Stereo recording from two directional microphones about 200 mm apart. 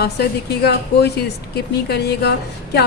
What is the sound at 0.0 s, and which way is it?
A woman's voice, 55° left (ahead or behind).